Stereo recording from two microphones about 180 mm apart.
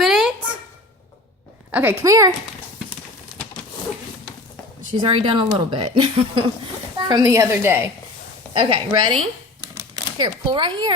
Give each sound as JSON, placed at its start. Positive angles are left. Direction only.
{"t": 0.0, "sound": "a sound", "side_deg": 0}
{"t": 1.7, "sound": "a woman's voice", "side_deg": -10}
{"t": 4.9, "sound": "a woman's voice", "side_deg": -30}
{"t": 7.1, "sound": "a woman's voice", "side_deg": -20}
{"t": 8.5, "sound": "a woman's voice", "side_deg": -25}
{"t": 9.6, "sound": "a sound", "side_deg": -20}